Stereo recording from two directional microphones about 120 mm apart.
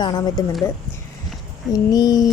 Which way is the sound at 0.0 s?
35° left (ahead or behind).